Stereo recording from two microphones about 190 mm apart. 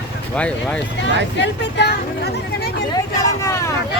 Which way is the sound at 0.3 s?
5° left (ahead or behind).